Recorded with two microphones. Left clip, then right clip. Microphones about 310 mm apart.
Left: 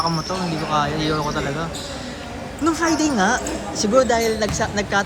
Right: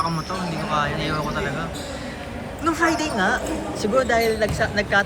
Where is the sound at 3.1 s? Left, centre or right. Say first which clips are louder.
Left 2 dB; left.